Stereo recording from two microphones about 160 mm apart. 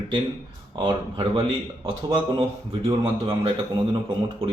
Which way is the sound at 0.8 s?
30° right (ahead or behind).